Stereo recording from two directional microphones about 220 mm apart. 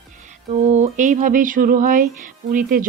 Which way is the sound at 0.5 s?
30° right (ahead or behind).